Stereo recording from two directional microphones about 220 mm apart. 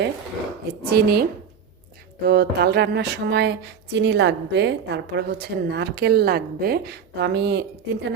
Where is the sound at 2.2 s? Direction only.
45° right (ahead or behind).